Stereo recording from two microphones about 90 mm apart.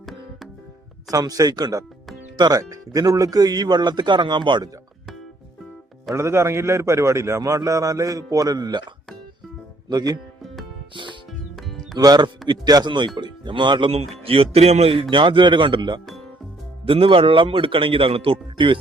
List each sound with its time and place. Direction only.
1.1 s speech: 40° right (ahead or behind)
2.6 s speech: 35° right (ahead or behind); by 4.7 s 60° right (ahead or behind)
6.1 s a man's voice: 30° right (ahead or behind); by 8.8 s 45° right (ahead or behind)
9.9 s speech: 45° right (ahead or behind)
10.4 s music: centre (ahead or behind)
10.9 s music: 65° right (ahead or behind)
11.3 s music: centre (ahead or behind)
11.9 s speech: 50° right (ahead or behind); by 14.4 s 90° right
15.1 s speech: 65° right (ahead or behind)
16.8 s a man's voice: 90° right; by 18.8 s 70° right (ahead or behind)